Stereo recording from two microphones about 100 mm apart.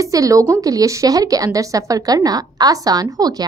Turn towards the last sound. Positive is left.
turn(degrees=-40)  # may be behind; listen again after turning